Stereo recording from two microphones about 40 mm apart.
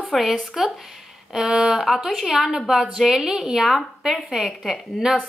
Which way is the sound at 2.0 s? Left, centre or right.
Centre.